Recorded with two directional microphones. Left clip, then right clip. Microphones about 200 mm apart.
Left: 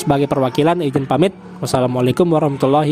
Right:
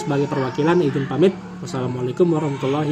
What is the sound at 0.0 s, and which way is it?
Speech, 50° left (ahead or behind).